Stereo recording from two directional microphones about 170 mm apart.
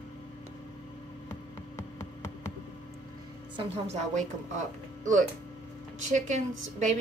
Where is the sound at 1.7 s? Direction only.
15° left (ahead or behind).